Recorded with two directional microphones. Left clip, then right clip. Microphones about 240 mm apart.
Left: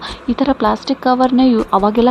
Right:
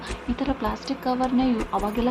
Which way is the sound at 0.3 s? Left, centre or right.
Left.